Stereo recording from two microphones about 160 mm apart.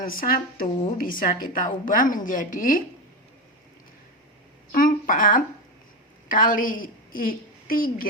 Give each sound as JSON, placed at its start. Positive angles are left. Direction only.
{"t": 0.0, "sound": "a woman's voice", "side_deg": 60}
{"t": 4.7, "sound": "a sound", "side_deg": 60}
{"t": 6.2, "sound": "a woman's voice", "side_deg": 60}